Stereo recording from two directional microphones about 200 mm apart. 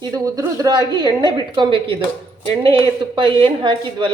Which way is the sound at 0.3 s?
20° right (ahead or behind).